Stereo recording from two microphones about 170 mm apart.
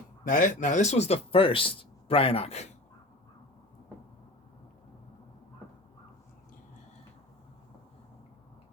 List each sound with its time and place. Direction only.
0.3 s speech: 50° left (ahead or behind)